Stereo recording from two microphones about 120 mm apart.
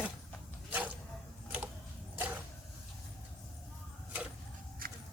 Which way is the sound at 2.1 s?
15° right (ahead or behind).